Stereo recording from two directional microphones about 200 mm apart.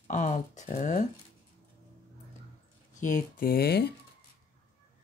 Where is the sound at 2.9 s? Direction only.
40° left (ahead or behind).